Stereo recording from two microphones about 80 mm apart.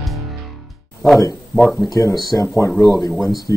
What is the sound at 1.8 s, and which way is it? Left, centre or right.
Speech, left.